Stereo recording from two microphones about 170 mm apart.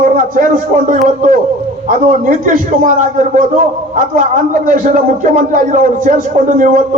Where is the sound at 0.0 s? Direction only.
50° right (ahead or behind).